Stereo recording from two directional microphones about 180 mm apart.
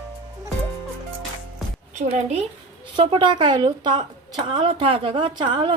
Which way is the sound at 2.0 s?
35° right (ahead or behind).